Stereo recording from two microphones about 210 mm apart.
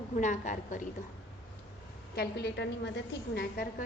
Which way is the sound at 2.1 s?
50° left (ahead or behind).